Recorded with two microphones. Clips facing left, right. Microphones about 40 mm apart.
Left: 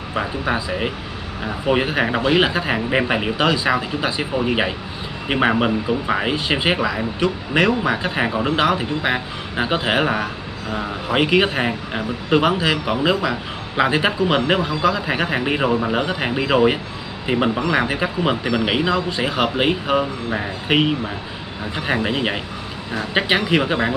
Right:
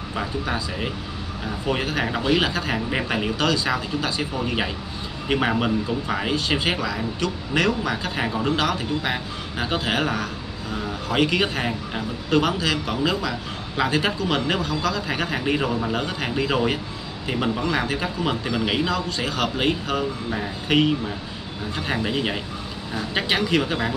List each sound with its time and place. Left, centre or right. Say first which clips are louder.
0.1 s speech: left 5 dB; left